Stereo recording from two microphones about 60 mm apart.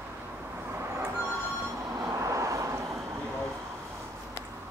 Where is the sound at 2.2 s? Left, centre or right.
Right.